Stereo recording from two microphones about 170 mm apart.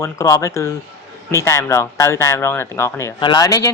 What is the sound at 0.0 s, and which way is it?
A man's voice, 20° left (ahead or behind).